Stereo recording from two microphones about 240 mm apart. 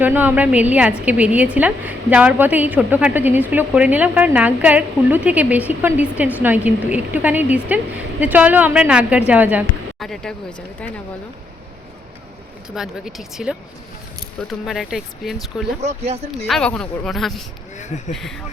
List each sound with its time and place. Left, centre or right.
0.0 s a woman's voice: centre
12.7 s a woman's voice: centre
14.6 s a woman's voice: centre
15.8 s speech: right
16.5 s a woman's voice: centre